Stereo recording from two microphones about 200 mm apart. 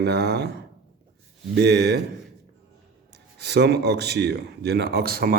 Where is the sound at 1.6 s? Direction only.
55° right (ahead or behind).